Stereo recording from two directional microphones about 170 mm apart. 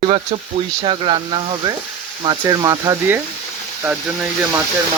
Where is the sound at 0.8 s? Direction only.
30° right (ahead or behind).